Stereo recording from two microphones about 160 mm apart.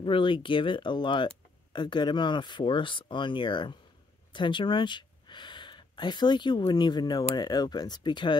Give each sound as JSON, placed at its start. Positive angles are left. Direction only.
{"t": 0.0, "sound": "speech", "side_deg": 30}